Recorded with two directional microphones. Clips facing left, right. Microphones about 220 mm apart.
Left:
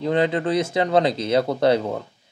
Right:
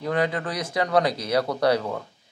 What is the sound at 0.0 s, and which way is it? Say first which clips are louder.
A man's voice: left 5 dB; 25° left (ahead or behind).